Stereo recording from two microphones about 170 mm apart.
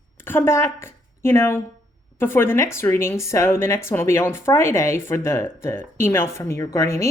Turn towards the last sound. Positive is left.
turn(degrees=15)  # may be behind; listen again after turning